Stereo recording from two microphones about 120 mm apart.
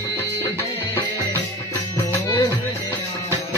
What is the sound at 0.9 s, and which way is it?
Music, 20° left (ahead or behind).